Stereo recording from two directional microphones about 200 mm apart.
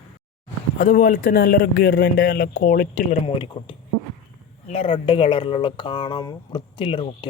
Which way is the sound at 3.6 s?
30° left (ahead or behind).